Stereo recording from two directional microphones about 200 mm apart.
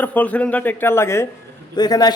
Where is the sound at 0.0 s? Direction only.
10° left (ahead or behind).